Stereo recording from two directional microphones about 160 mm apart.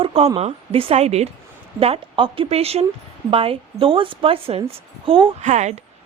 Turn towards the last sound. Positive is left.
turn(degrees=-45)  # may be behind; listen again after turning